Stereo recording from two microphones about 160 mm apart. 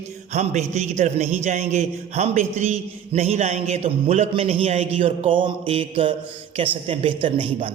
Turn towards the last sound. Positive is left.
turn(degrees=-35)  # may be behind; listen again after turning